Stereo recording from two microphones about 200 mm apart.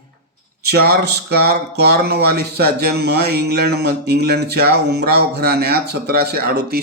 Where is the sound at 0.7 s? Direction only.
50° right (ahead or behind).